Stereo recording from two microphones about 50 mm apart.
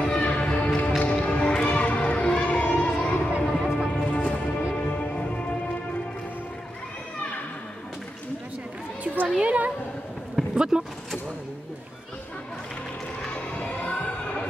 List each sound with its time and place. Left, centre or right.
0.0 s music: left
3.5 s music: centre
3.9 s music: left
9.0 s a sound: right
9.4 s a sound: right
10.5 s vehicle: centre
13.3 s crowd: left